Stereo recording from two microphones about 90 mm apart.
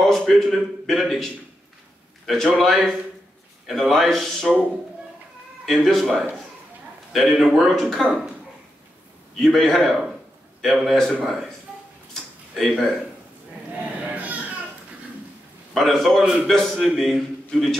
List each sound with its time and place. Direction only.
0.0 s a man's voice: 5° left (ahead or behind)
5.7 s a man's voice: centre (ahead or behind)
9.4 s a man's voice: 5° left (ahead or behind)
12.5 s a man's voice: centre (ahead or behind)
14.0 s baby cry: 15° right (ahead or behind)
15.7 s a man's voice: 5° left (ahead or behind)